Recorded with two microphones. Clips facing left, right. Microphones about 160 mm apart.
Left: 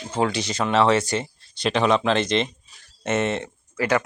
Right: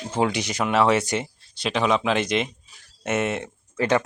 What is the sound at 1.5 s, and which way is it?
Speech, 5° right (ahead or behind).